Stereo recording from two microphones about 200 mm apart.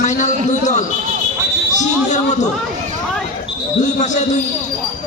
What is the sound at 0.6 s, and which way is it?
Basketball bounce, 35° left (ahead or behind).